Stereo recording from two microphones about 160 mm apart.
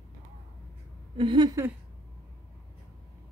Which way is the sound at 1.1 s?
30° right (ahead or behind).